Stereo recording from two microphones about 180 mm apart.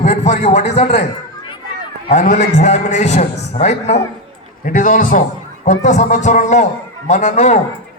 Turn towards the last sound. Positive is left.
turn(degrees=40)  # may be behind; listen again after turning